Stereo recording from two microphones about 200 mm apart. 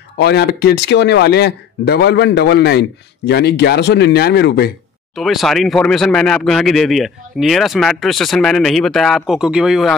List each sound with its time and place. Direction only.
0.2 s speech: 55° left (ahead or behind)
5.1 s speech: centre (ahead or behind)